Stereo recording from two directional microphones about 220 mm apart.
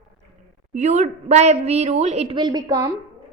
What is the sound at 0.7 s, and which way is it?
A woman's voice, 30° right (ahead or behind).